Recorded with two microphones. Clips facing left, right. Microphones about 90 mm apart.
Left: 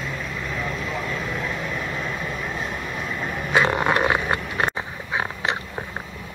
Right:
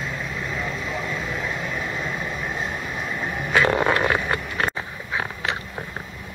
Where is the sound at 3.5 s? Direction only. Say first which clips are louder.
Even; 20° left (ahead or behind).